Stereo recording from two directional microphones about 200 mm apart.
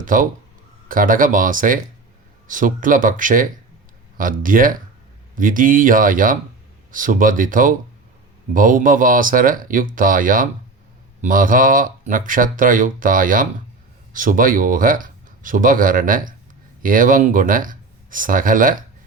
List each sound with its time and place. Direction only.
0.0 s speech: 40° right (ahead or behind)